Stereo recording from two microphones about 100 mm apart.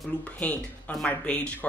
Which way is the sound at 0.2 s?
15° left (ahead or behind).